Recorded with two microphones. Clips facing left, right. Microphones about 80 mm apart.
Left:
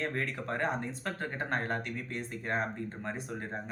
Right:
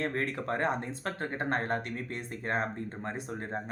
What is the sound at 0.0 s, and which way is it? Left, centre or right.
Speech, right.